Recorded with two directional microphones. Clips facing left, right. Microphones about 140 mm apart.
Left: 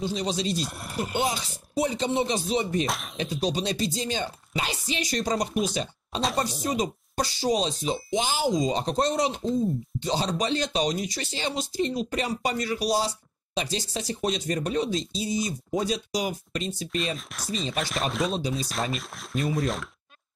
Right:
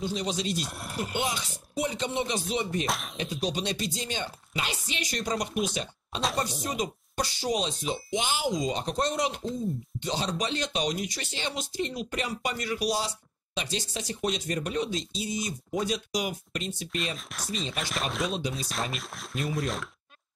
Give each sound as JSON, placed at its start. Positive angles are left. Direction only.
{"t": 0.1, "sound": "speech", "side_deg": 35}
{"t": 0.6, "sound": "speech", "side_deg": 0}
{"t": 1.1, "sound": "speech", "side_deg": 35}
{"t": 2.8, "sound": "speech", "side_deg": 0}
{"t": 3.5, "sound": "speech", "side_deg": 35}
{"t": 6.8, "sound": "speech", "side_deg": 35}
{"t": 16.9, "sound": "speech", "side_deg": 0}